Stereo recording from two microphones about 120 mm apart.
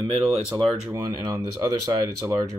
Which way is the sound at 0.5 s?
30° right (ahead or behind).